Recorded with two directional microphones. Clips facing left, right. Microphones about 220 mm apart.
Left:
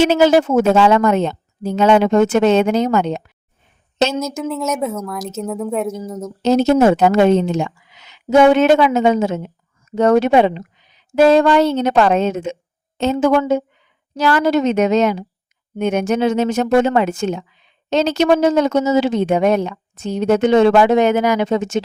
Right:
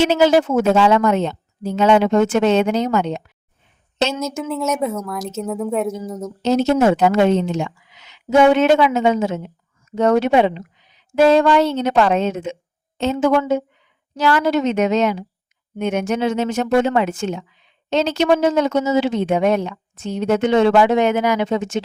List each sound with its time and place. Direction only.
0.0 s a woman's voice: 50° left (ahead or behind)
4.2 s speech: centre (ahead or behind)
6.4 s a woman's voice: 40° left (ahead or behind)